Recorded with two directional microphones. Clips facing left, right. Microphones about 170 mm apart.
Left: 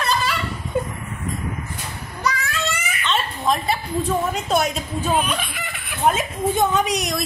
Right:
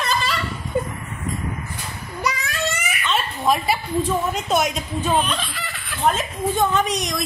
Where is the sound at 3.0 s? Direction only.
5° right (ahead or behind).